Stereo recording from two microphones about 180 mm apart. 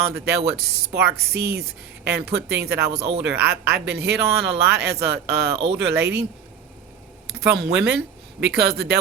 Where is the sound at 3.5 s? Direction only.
65° right (ahead or behind).